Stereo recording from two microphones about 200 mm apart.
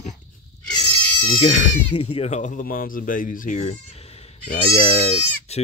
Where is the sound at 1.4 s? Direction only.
40° left (ahead or behind).